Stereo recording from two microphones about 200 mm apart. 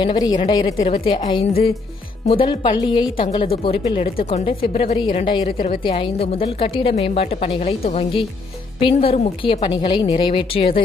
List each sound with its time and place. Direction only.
0.0 s speech: 20° left (ahead or behind)
5.5 s a woman's voice: 45° left (ahead or behind)
5.8 s speech: 25° left (ahead or behind)